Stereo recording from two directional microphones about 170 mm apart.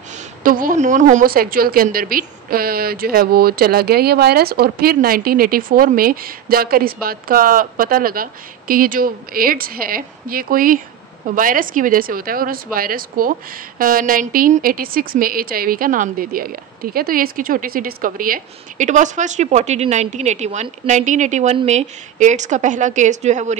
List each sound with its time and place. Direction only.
0.4 s a woman's voice: 55° right (ahead or behind)